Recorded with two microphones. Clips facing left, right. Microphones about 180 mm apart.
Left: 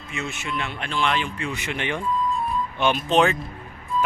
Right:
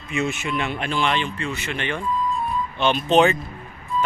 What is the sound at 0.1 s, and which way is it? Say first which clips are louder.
Speech: right 6 dB; 15° right (ahead or behind).